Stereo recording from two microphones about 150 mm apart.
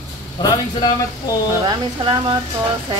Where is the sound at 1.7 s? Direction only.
30° right (ahead or behind).